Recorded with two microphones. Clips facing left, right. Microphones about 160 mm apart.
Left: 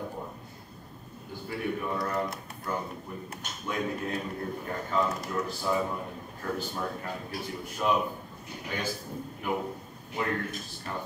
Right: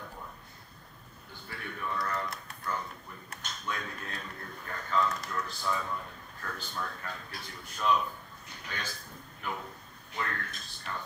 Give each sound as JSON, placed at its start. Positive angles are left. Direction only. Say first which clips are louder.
{"t": 1.5, "sound": "speech", "louder": "left 6 dB", "side_deg": 15}
{"t": 5.5, "sound": "speech", "louder": "left 6 dB", "side_deg": 10}
{"t": 5.9, "sound": "a man's voice", "louder": "left 4 dB", "side_deg": 20}
{"t": 10.1, "sound": "speech", "louder": "left 6 dB", "side_deg": 20}